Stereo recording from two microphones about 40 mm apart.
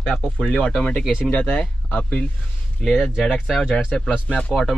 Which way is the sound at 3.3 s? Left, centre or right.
Centre.